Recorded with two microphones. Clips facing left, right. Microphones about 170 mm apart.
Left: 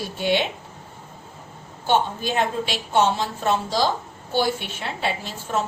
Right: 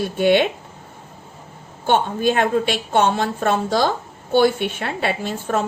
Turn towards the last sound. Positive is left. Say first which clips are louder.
# right 4 dB
turn(degrees=-55)  # may be behind; listen again after turning